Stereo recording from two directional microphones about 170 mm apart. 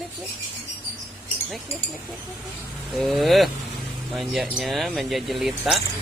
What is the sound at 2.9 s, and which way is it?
Speech, centre (ahead or behind).